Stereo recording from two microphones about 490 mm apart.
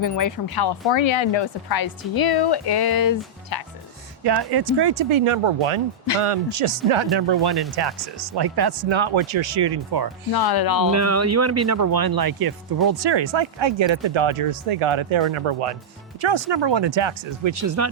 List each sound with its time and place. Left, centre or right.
0.0 s speech: left
4.2 s speech: right
10.3 s speech: left
10.9 s speech: right
16.2 s speech: right